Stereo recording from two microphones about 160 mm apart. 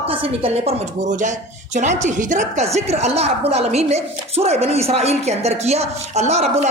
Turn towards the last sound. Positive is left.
turn(degrees=-45)  # may be behind; listen again after turning